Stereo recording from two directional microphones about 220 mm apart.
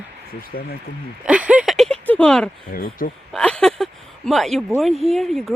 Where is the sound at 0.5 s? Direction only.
45° left (ahead or behind).